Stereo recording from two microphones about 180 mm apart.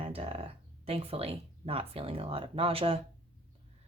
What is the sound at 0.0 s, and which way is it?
Speech, 30° right (ahead or behind).